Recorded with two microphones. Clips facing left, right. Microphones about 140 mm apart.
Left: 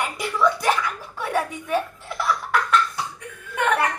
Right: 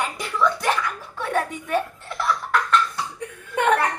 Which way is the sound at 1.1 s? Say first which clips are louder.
Even; 5° left (ahead or behind).